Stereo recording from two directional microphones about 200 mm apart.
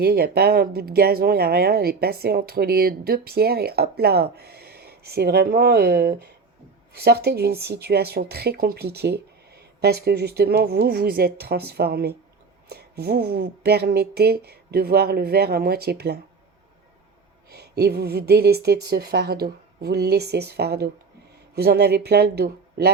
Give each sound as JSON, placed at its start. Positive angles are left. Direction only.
{"t": 0.0, "sound": "speech", "side_deg": -50}
{"t": 17.5, "sound": "speech", "side_deg": -55}